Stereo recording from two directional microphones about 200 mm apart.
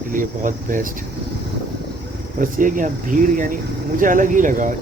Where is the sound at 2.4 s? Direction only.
40° right (ahead or behind).